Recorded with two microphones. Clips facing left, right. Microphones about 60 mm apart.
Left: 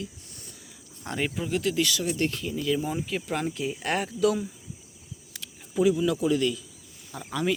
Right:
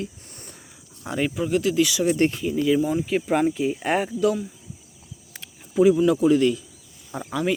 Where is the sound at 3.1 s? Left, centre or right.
Centre.